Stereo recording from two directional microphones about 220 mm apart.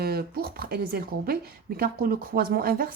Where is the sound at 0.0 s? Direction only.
45° right (ahead or behind).